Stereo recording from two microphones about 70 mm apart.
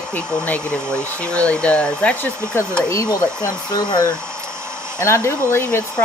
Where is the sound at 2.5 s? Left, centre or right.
Left.